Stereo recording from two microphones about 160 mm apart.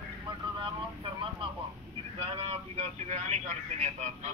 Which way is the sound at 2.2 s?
40° right (ahead or behind).